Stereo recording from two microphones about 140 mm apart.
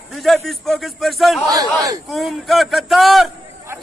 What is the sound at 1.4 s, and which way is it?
Speech, 25° right (ahead or behind).